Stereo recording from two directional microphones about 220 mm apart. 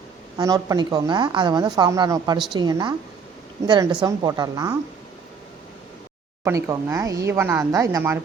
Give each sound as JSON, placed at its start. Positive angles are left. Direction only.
{"t": 0.3, "sound": "a woman's voice", "side_deg": -15}
{"t": 6.4, "sound": "speech", "side_deg": -10}